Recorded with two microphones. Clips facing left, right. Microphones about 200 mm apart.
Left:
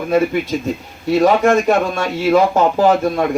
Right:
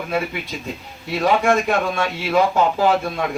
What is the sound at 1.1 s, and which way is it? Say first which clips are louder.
Speech: left 5 dB; 40° left (ahead or behind).